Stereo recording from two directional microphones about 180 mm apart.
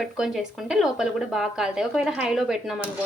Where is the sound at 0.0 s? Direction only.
Centre (ahead or behind).